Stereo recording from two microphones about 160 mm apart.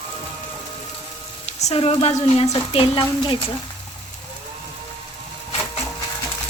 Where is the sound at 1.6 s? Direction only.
35° left (ahead or behind).